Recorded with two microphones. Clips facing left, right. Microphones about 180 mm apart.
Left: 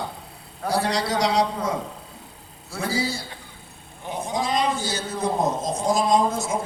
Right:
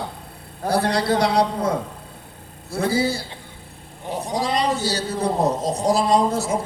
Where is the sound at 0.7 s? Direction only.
55° right (ahead or behind).